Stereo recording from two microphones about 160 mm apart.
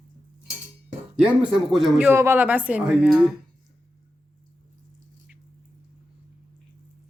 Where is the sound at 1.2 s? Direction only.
5° right (ahead or behind).